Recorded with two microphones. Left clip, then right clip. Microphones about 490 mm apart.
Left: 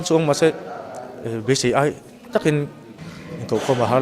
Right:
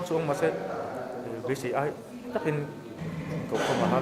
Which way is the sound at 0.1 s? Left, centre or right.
Left.